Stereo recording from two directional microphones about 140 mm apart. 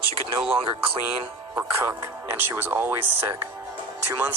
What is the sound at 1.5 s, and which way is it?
Speech, 15° right (ahead or behind).